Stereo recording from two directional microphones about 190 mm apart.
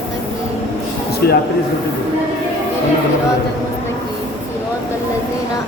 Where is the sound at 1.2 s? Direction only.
55° left (ahead or behind).